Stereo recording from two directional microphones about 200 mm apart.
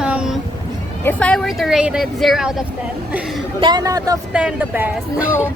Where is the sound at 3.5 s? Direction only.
20° right (ahead or behind).